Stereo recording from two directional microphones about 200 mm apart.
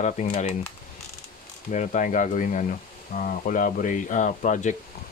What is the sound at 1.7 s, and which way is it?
Speech, 40° left (ahead or behind).